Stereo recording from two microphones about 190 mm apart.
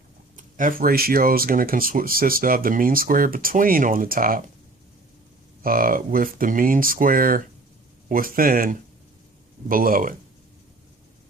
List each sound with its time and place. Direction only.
0.3 s speech: 45° right (ahead or behind)
5.6 s speech: 50° right (ahead or behind)